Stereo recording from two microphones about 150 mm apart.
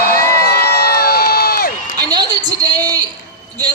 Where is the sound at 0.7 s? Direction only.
90° left.